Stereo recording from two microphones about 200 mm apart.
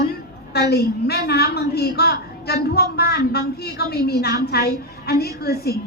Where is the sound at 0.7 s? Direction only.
55° left (ahead or behind).